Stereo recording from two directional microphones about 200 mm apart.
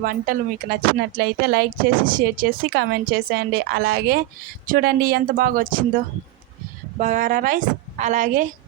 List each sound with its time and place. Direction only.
0.0 s speech: 50° right (ahead or behind)
7.0 s a woman's voice: 40° right (ahead or behind)